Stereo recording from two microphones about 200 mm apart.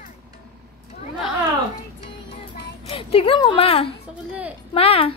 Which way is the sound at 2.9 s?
30° left (ahead or behind).